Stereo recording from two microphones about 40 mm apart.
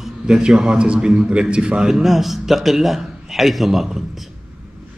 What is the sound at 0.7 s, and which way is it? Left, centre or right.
Speech, right.